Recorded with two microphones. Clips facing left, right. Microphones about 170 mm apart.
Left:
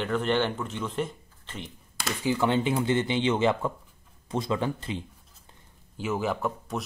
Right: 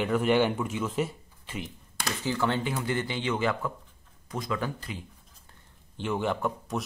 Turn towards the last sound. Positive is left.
turn(degrees=0)  # may be behind; listen again after turning